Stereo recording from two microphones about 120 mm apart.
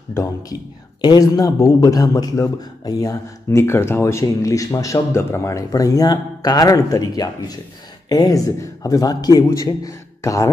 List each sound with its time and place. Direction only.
0.1 s a man's voice: 30° left (ahead or behind)